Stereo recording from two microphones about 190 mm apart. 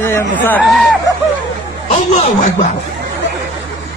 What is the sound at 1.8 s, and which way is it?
Speech, 40° left (ahead or behind).